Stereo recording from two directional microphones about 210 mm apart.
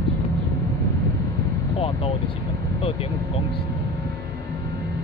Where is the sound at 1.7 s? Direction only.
25° left (ahead or behind).